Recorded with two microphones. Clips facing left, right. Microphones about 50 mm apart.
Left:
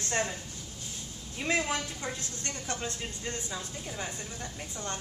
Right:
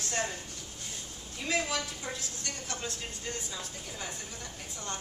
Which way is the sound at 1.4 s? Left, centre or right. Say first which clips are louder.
Left 2 dB; left.